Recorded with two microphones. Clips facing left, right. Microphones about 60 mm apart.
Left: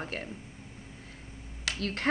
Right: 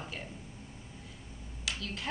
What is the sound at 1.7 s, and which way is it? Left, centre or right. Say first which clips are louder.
Speech: left 5 dB; left.